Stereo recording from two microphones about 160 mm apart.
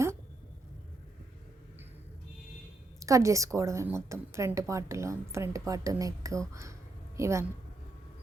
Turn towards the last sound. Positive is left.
turn(degrees=-20)  # may be behind; listen again after turning